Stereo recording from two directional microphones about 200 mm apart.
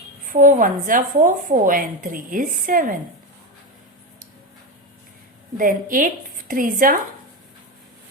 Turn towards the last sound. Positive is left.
turn(degrees=-45)  # may be behind; listen again after turning